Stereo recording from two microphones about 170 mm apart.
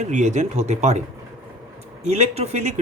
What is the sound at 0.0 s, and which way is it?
Speech, 45° right (ahead or behind).